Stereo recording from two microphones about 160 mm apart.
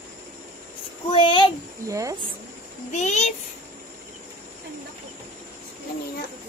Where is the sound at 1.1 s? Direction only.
30° left (ahead or behind).